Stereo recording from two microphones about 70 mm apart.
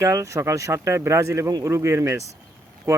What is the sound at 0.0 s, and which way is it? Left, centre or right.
Speech, right.